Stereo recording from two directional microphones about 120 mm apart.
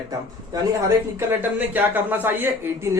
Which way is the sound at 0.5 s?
30° right (ahead or behind).